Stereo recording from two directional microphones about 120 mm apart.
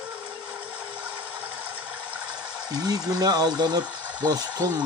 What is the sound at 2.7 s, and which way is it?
Speech, 35° right (ahead or behind).